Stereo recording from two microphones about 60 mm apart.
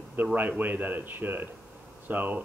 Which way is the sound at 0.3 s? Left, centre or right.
Right.